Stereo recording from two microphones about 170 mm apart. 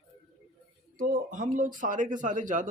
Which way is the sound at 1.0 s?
50° right (ahead or behind).